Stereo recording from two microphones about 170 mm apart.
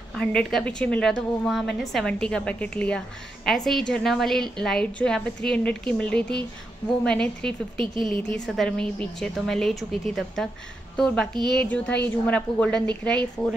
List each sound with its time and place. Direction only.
0.1 s a woman's voice: 5° left (ahead or behind)
7.7 s speech: 30° right (ahead or behind)
8.5 s a woman's voice: 5° left (ahead or behind)